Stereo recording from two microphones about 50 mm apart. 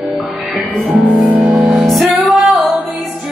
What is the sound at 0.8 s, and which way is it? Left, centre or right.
Music, right.